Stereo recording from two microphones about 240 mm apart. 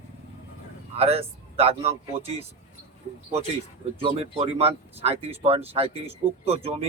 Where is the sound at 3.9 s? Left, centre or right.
Right.